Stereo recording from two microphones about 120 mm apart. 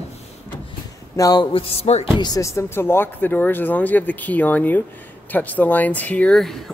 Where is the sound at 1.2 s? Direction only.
30° left (ahead or behind).